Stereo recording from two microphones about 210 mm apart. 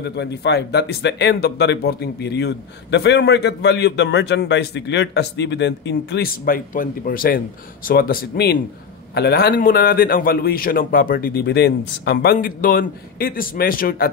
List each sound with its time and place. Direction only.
0.0 s speech: 55° left (ahead or behind)